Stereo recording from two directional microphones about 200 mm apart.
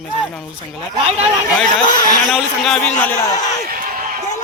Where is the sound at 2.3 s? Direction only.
Centre (ahead or behind).